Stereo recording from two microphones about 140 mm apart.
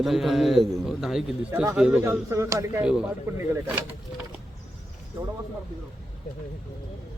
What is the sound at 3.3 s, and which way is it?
Speech, 20° right (ahead or behind).